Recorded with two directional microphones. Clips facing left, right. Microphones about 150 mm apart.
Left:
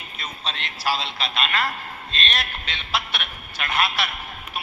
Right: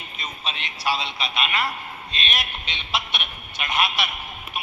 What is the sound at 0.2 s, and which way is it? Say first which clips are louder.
A man's voice: left 1 dB; 5° right (ahead or behind).